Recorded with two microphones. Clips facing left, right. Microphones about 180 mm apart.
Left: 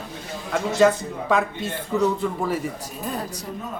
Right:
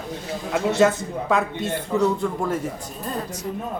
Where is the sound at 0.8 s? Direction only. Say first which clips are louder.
Left 3 dB; centre (ahead or behind).